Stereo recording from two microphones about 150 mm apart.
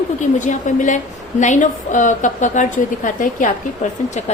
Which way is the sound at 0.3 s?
55° left (ahead or behind).